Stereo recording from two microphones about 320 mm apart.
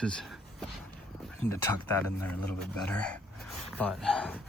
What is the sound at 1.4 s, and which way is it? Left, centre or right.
Speech, centre.